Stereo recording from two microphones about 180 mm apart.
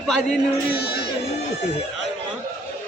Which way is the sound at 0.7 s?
60° left (ahead or behind).